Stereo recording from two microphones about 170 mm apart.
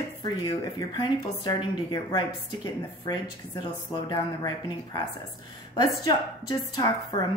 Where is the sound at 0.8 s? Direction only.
25° left (ahead or behind).